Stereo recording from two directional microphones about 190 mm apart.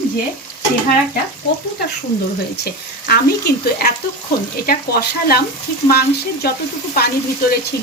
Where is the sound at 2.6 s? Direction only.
55° left (ahead or behind).